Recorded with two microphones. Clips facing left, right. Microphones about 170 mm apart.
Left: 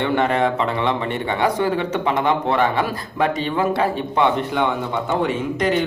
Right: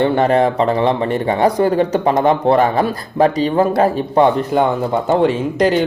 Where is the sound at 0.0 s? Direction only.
35° right (ahead or behind).